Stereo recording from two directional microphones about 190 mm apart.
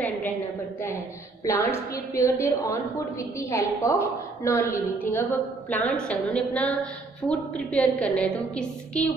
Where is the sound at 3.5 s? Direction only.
15° left (ahead or behind).